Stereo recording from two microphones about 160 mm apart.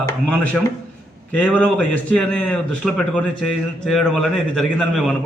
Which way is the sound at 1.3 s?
10° left (ahead or behind).